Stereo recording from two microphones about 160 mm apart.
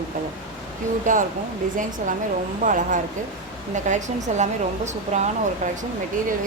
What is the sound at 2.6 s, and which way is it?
A woman's voice, 55° right (ahead or behind).